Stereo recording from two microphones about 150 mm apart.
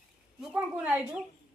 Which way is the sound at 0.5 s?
10° right (ahead or behind).